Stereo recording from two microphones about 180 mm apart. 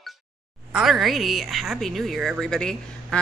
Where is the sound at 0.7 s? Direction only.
Centre (ahead or behind).